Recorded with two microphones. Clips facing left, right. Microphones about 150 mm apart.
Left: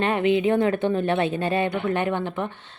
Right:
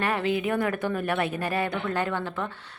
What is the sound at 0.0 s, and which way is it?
Speech, 20° left (ahead or behind).